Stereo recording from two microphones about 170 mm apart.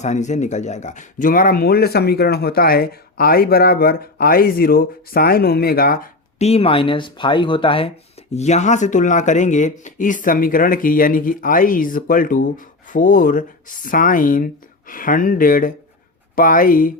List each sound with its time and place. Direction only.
0.0 s speech: 45° left (ahead or behind)
6.4 s speech: 35° left (ahead or behind)
8.3 s speech: 40° left (ahead or behind)